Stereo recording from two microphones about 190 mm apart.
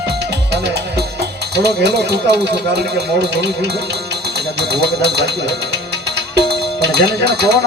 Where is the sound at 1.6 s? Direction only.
60° right (ahead or behind).